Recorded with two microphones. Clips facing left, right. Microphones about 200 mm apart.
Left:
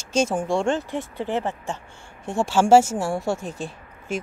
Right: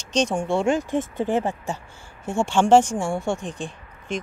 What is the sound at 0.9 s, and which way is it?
Speech, 50° right (ahead or behind).